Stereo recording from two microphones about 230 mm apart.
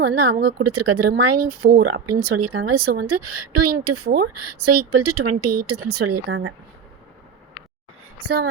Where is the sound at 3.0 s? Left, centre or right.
Right.